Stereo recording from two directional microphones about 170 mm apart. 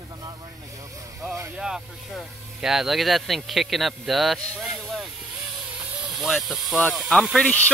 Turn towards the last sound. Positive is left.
turn(degrees=0)  # may be behind; listen again after turning